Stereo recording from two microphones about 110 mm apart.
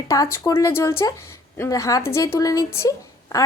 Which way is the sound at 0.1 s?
30° left (ahead or behind).